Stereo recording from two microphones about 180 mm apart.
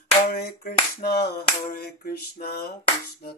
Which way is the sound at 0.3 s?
60° left (ahead or behind).